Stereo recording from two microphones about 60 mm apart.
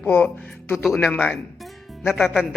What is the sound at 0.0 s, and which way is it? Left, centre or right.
Speech, left.